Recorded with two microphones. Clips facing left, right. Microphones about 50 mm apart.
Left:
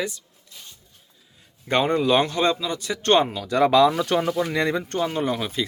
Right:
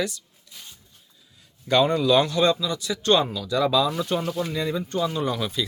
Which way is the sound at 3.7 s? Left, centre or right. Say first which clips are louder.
Left 5 dB; left.